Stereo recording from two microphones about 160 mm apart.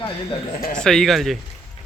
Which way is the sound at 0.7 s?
5° left (ahead or behind).